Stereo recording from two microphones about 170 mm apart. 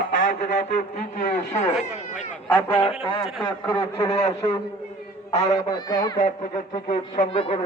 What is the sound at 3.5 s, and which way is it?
Speech, 25° left (ahead or behind).